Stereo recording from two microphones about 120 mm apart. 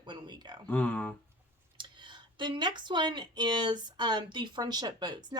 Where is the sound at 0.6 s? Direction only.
10° left (ahead or behind).